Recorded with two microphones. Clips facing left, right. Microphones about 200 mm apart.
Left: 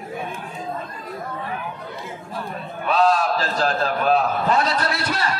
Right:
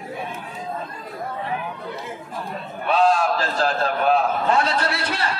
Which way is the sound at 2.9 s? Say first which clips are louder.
Even; 40° left (ahead or behind).